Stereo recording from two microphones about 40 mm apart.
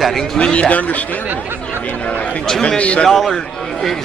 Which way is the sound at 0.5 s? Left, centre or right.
Left.